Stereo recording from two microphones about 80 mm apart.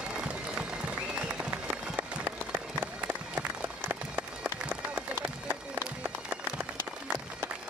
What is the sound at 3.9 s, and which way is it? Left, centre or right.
Run, right.